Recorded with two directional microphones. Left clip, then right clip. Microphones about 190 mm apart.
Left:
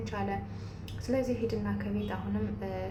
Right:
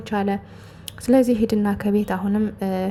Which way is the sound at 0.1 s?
50° right (ahead or behind).